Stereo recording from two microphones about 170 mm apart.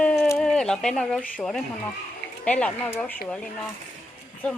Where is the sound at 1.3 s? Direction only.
5° left (ahead or behind).